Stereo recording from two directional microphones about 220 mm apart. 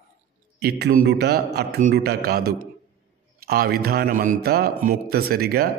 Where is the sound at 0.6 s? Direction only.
45° right (ahead or behind).